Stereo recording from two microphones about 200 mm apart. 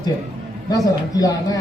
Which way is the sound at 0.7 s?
15° left (ahead or behind).